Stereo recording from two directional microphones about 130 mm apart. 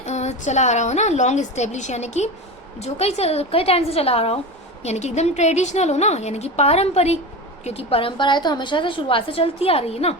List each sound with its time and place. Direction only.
0.0 s a woman's voice: 60° left (ahead or behind)